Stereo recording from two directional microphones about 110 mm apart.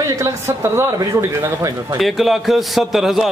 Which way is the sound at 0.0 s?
30° right (ahead or behind).